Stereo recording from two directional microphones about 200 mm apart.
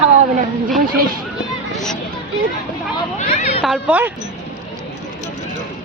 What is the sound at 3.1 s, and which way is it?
Speech, 35° left (ahead or behind).